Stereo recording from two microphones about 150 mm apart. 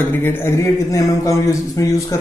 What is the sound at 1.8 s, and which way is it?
Speech, 25° left (ahead or behind).